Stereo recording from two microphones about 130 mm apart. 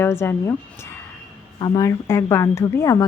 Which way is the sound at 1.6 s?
30° left (ahead or behind).